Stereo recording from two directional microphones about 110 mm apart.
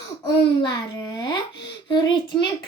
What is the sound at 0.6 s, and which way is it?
A child's voice, 35° left (ahead or behind).